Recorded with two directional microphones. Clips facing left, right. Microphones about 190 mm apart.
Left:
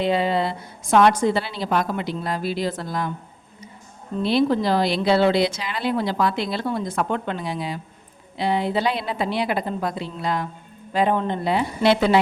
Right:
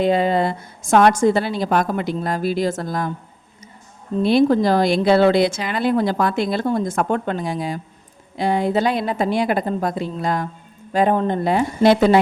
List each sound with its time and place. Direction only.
0.0 s speech: 45° right (ahead or behind)
4.2 s speech: 50° right (ahead or behind)